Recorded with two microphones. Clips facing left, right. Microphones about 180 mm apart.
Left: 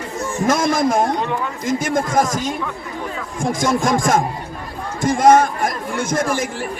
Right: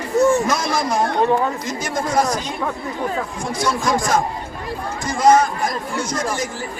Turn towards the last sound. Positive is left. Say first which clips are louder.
# left 3 dB
turn(degrees=55)  # may be behind; listen again after turning